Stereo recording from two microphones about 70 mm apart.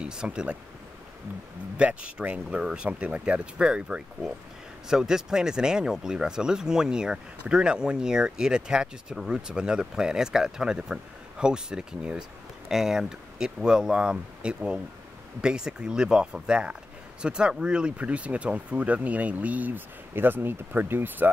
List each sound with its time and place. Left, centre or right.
0.0 s speech: centre
1.8 s speech: centre